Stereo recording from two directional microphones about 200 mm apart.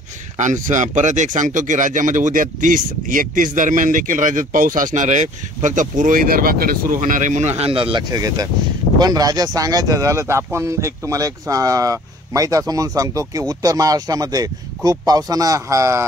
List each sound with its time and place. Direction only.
0.4 s speech: 40° right (ahead or behind); by 16.1 s 15° right (ahead or behind)